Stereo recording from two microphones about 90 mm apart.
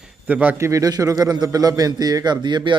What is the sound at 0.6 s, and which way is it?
A man's voice, 40° right (ahead or behind).